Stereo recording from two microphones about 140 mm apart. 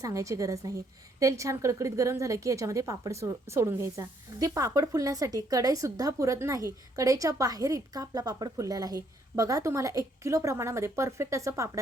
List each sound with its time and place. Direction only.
0.0 s a woman's voice: 20° right (ahead or behind)